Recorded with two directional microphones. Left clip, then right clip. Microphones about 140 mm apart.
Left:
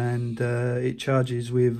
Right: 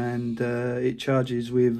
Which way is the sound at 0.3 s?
55° left (ahead or behind).